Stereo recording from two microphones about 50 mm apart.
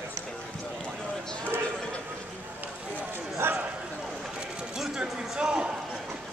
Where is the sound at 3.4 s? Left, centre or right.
Right.